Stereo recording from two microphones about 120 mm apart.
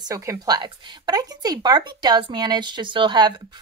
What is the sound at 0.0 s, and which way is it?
Speech, 25° right (ahead or behind).